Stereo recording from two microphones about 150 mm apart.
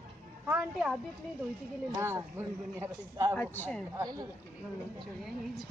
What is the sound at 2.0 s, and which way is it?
A man's voice, 20° right (ahead or behind).